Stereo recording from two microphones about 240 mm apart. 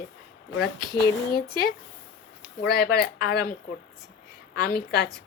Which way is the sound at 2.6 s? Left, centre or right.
Left.